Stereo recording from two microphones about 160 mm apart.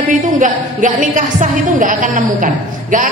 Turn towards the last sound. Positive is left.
turn(degrees=-55)  # may be behind; listen again after turning